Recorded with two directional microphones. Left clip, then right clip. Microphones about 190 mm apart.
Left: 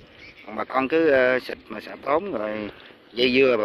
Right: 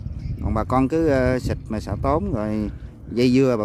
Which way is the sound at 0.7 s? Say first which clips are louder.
Left 1 dB; 20° right (ahead or behind).